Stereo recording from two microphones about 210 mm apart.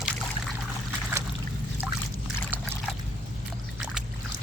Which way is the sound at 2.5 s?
10° right (ahead or behind).